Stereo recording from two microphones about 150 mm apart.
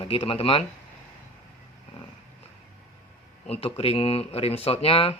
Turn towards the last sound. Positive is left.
turn(degrees=40)  # may be behind; listen again after turning